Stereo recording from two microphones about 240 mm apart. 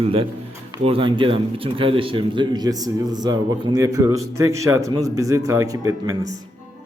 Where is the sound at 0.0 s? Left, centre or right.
Right.